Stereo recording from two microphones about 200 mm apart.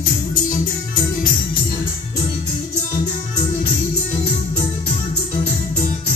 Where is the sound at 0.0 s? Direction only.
45° left (ahead or behind).